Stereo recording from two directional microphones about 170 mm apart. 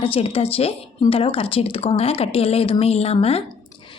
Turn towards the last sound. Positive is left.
turn(degrees=35)  # may be behind; listen again after turning